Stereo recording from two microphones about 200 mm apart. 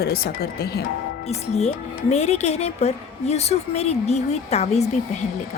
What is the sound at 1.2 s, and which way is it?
A woman's voice, 30° left (ahead or behind).